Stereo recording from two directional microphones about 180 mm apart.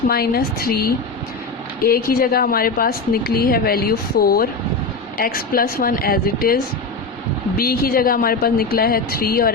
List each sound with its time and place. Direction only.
0.1 s a woman's voice: 60° left (ahead or behind)